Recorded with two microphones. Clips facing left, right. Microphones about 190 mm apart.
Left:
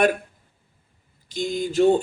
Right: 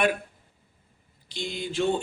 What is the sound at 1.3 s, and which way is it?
Speech, 45° left (ahead or behind).